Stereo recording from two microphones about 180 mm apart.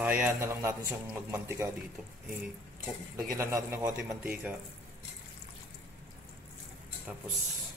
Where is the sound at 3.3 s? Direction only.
15° right (ahead or behind).